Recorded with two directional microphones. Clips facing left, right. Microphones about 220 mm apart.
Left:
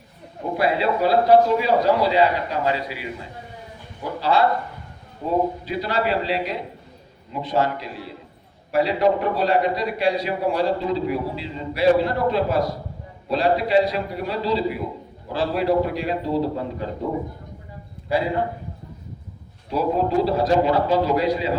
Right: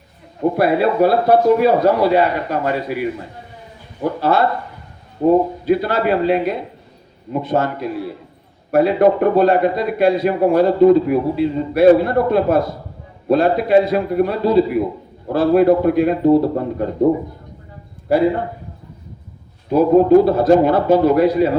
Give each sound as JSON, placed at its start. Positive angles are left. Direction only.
{"t": 0.5, "sound": "a man's voice", "side_deg": -55}
{"t": 4.2, "sound": "a man's voice", "side_deg": -55}
{"t": 19.7, "sound": "a man's voice", "side_deg": -50}